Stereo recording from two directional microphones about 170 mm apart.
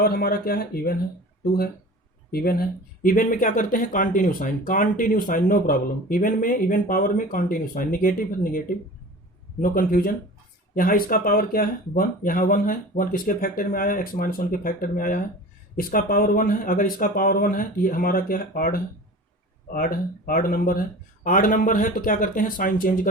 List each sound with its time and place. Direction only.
0.0 s speech: 60° left (ahead or behind)
2.3 s speech: 60° left (ahead or behind)
9.6 s speech: 55° left (ahead or behind)